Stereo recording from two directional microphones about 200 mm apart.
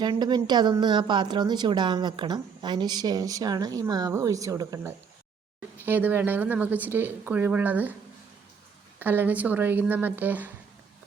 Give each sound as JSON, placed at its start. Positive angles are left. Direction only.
{"t": 0.0, "sound": "a woman's voice", "side_deg": -20}
{"t": 9.0, "sound": "speech", "side_deg": -10}